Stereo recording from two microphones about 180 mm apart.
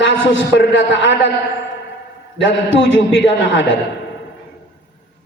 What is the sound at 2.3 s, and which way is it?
A man's voice, 90° left.